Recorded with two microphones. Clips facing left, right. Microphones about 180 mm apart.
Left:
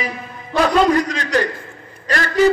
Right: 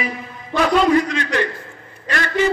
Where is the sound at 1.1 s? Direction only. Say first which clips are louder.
Left 2 dB; 40° left (ahead or behind).